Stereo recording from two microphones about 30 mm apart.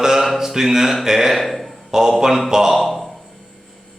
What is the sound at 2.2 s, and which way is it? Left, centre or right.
Speech, centre.